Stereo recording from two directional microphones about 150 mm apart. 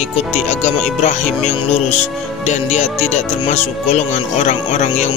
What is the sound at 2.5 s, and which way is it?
Speech, 50° left (ahead or behind).